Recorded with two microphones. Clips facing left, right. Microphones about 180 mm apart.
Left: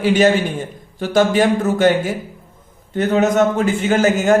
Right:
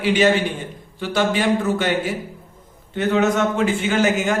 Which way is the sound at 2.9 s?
40° left (ahead or behind).